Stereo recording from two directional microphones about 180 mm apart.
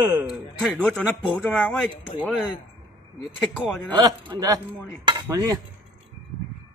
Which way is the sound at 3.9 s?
20° right (ahead or behind).